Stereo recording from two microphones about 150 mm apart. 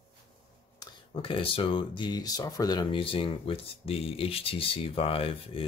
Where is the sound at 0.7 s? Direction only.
35° left (ahead or behind).